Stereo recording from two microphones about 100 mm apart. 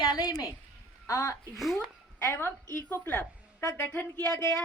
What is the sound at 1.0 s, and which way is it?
Speech, 30° left (ahead or behind).